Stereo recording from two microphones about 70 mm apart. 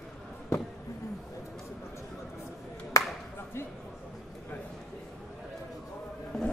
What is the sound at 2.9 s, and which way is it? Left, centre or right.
Music, left.